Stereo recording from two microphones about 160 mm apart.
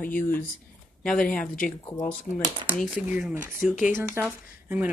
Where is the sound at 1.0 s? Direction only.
5° left (ahead or behind).